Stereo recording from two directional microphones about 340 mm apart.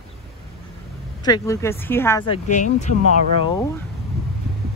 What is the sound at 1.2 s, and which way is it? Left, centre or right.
Speech, centre.